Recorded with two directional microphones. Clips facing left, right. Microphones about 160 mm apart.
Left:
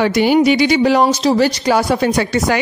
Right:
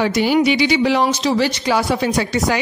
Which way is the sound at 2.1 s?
60° left (ahead or behind).